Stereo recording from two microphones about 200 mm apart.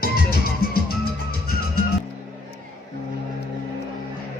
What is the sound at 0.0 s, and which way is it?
Music, 50° left (ahead or behind).